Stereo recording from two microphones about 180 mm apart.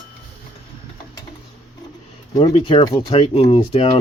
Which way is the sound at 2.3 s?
30° left (ahead or behind).